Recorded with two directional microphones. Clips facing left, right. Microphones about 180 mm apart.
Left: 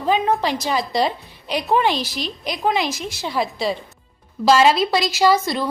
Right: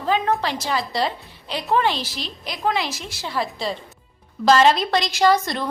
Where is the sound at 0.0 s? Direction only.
15° left (ahead or behind).